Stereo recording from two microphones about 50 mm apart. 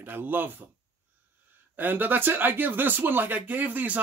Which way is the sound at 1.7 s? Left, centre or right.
Right.